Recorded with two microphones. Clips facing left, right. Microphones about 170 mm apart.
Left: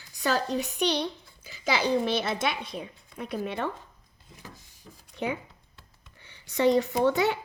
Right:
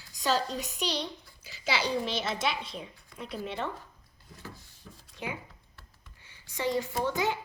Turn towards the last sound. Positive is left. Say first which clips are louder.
# left 6 dB
turn(degrees=65)  # may be behind; listen again after turning